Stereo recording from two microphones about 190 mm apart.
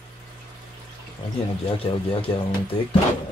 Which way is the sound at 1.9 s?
30° left (ahead or behind).